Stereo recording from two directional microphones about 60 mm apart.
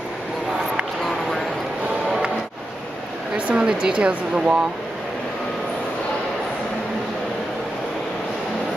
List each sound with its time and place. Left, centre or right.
3.3 s speech: centre